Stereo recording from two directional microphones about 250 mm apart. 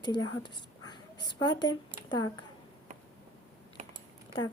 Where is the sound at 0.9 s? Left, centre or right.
Centre.